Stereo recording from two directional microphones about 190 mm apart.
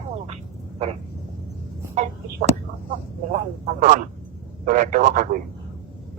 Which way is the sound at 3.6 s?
40° right (ahead or behind).